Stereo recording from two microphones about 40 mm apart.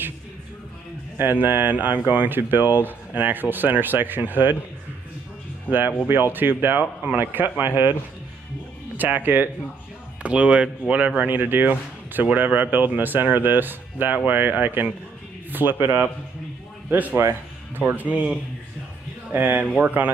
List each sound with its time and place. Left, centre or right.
1.1 s speech: right
5.7 s speech: right
8.9 s speech: right
10.2 s speech: right
11.2 s speech: right
16.9 s speech: right
19.3 s speech: right